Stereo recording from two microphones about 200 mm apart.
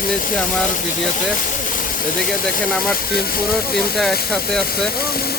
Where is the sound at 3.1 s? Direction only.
50° left (ahead or behind).